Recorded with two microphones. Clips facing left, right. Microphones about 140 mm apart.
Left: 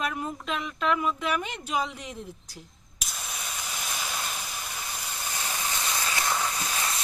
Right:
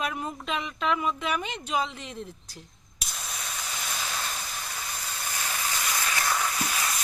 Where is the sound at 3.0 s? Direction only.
Centre (ahead or behind); by 7.0 s 25° left (ahead or behind).